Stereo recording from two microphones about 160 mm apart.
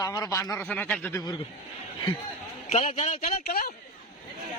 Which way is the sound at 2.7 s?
45° left (ahead or behind).